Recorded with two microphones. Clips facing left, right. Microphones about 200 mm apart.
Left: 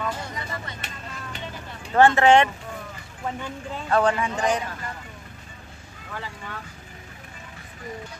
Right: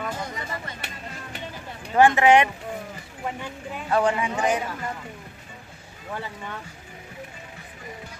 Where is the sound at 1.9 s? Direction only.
15° right (ahead or behind).